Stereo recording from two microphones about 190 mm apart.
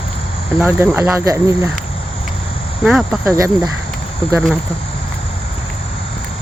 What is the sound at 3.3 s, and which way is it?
Speech, 15° right (ahead or behind).